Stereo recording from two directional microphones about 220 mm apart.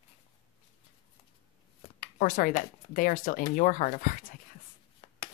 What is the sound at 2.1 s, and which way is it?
Speech, 40° left (ahead or behind).